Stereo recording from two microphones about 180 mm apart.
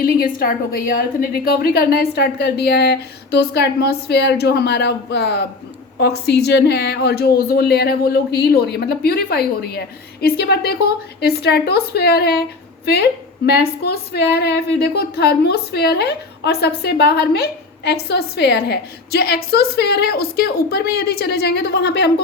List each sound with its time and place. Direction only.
0.0 s a woman's voice: 55° left (ahead or behind)